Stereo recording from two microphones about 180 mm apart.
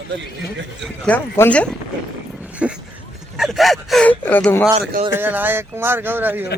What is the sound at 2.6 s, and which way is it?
Speech, 5° right (ahead or behind).